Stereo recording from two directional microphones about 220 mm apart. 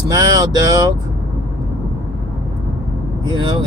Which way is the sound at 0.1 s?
15° right (ahead or behind).